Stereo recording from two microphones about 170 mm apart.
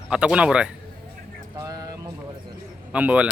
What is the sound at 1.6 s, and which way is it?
Speech, 20° right (ahead or behind).